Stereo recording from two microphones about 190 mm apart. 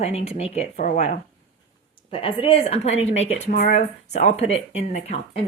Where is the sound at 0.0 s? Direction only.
35° left (ahead or behind).